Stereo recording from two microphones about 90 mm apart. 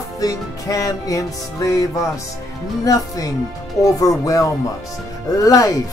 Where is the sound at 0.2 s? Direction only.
40° left (ahead or behind).